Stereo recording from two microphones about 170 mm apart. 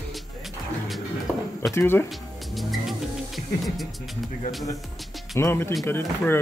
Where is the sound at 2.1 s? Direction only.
Centre (ahead or behind).